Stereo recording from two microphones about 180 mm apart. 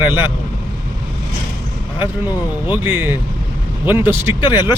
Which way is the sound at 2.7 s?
10° right (ahead or behind).